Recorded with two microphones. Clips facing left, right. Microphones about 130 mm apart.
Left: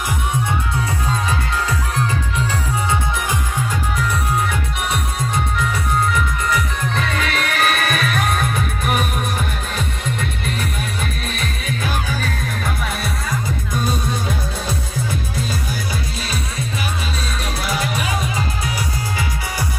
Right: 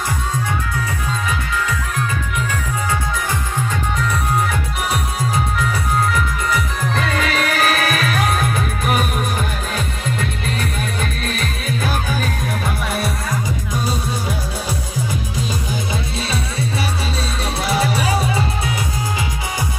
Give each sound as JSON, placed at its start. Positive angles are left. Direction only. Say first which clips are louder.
{"t": 6.1, "sound": "music", "louder": "even", "side_deg": 0}
{"t": 15.9, "sound": "music", "louder": "right 3 dB", "side_deg": -30}
{"t": 17.6, "sound": "music", "louder": "right 5 dB", "side_deg": -30}